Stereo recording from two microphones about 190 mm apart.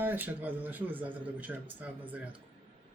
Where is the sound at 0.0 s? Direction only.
10° right (ahead or behind).